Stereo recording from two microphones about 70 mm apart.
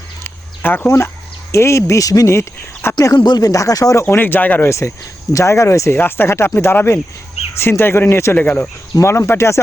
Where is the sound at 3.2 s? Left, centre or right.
Left.